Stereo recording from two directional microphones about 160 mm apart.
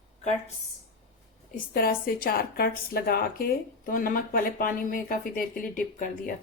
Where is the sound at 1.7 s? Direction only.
70° left (ahead or behind).